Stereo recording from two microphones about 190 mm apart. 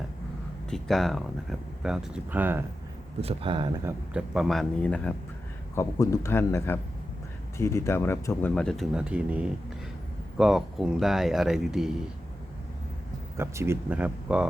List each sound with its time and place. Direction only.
0.7 s speech: centre (ahead or behind)
3.2 s speech: 30° right (ahead or behind)
4.1 s speech: centre (ahead or behind)
13.3 s speech: 15° right (ahead or behind)